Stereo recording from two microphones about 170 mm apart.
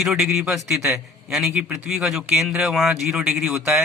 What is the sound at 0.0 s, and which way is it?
A man's voice, centre (ahead or behind).